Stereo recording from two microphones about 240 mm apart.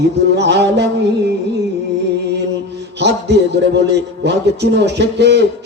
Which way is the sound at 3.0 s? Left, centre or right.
Right.